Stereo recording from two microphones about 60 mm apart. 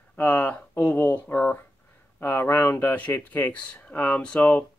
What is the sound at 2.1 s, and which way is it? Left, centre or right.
Speech, left.